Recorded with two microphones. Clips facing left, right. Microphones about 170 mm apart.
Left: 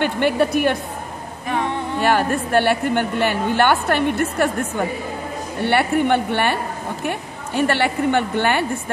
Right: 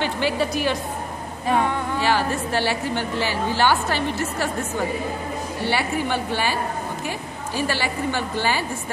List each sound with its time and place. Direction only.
0.0 s a woman's voice: 60° left (ahead or behind)
2.0 s a woman's voice: 55° left (ahead or behind)
5.6 s a woman's voice: 60° left (ahead or behind)